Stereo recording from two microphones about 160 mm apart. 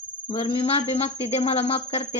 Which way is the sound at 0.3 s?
30° left (ahead or behind).